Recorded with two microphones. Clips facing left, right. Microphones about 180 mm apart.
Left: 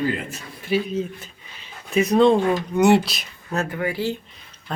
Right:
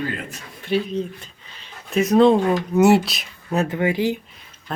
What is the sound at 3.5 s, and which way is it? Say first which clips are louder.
Speech: right 4 dB; 20° right (ahead or behind).